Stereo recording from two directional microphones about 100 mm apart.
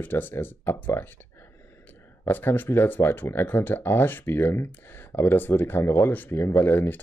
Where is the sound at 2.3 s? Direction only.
20° left (ahead or behind).